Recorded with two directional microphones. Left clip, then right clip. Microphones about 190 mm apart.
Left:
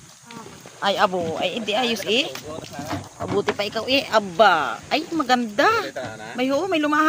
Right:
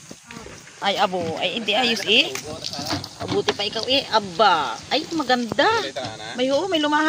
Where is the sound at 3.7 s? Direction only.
30° left (ahead or behind).